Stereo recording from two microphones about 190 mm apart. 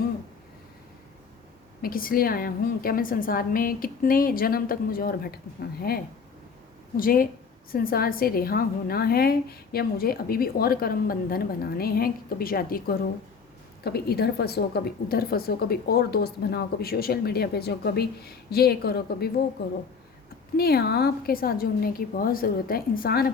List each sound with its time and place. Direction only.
1.8 s a woman's voice: 50° left (ahead or behind)
20.6 s a woman's voice: 55° left (ahead or behind)